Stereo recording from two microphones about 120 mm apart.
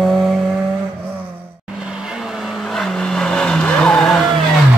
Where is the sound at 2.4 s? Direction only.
5° left (ahead or behind).